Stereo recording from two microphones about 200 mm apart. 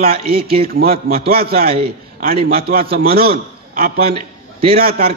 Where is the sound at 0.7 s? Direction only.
50° right (ahead or behind).